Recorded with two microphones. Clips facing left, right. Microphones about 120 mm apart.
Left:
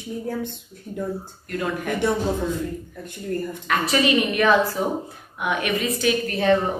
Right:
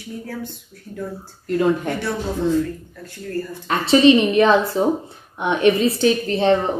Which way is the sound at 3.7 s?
30° right (ahead or behind).